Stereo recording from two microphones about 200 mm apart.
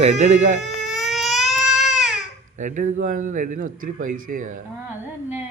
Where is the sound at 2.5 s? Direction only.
40° right (ahead or behind).